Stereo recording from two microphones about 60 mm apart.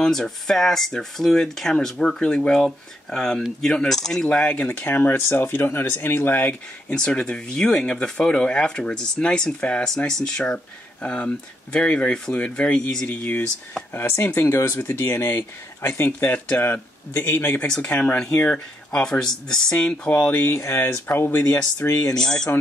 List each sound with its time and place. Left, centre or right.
0.0 s speech: centre
4.3 s speech: left
4.7 s speech: left
6.9 s speech: centre
13.9 s speech: left
16.3 s speech: left
19.0 s speech: centre
20.2 s speech: left
22.1 s speech: centre